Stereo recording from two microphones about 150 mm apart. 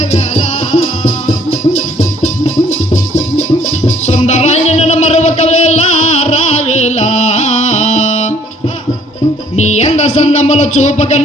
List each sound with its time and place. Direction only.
0.0 s music: 45° left (ahead or behind)
9.6 s music: 50° left (ahead or behind)